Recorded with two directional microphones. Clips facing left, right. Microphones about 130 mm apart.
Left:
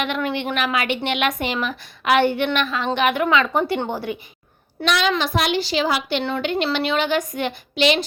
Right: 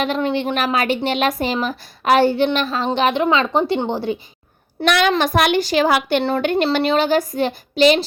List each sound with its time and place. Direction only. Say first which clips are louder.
0.0 s a woman's voice: right 4 dB; 35° right (ahead or behind)
4.9 s speech: right 4 dB; 60° right (ahead or behind); by 8.0 s 35° right (ahead or behind)